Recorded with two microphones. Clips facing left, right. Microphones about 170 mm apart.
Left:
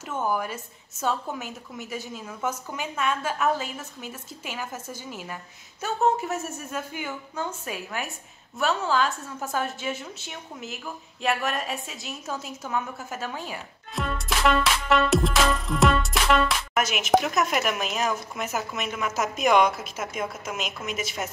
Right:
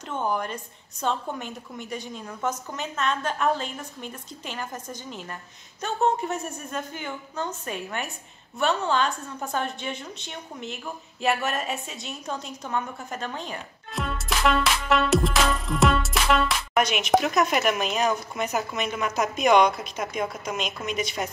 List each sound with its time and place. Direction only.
0.1 s a woman's voice: 5° left (ahead or behind)